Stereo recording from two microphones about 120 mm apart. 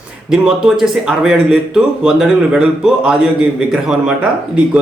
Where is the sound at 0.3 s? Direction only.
5° right (ahead or behind).